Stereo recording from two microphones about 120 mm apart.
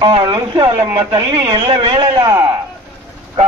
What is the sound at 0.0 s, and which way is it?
Speech, 40° right (ahead or behind).